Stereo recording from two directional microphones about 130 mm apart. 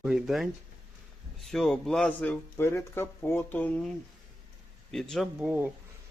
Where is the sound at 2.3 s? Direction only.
20° left (ahead or behind).